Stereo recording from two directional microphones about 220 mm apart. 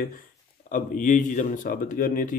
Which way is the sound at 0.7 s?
35° left (ahead or behind).